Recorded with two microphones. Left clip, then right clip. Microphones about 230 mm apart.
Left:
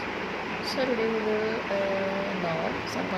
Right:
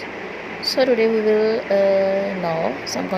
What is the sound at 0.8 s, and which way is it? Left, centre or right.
Speech, right.